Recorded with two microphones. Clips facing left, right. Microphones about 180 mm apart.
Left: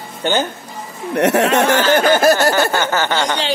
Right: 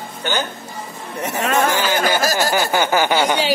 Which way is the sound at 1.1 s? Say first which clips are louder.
Left 7 dB; 75° left (ahead or behind).